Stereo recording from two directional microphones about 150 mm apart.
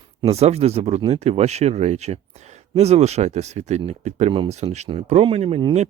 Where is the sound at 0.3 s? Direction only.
45° right (ahead or behind).